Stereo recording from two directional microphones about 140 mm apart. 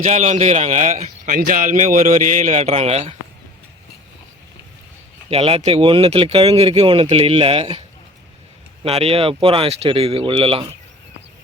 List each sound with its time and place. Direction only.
0.0 s speech: 55° right (ahead or behind)
5.3 s speech: 45° right (ahead or behind)
8.8 s speech: 45° right (ahead or behind)